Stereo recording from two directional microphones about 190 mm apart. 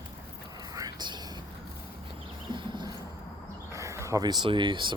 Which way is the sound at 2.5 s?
25° right (ahead or behind).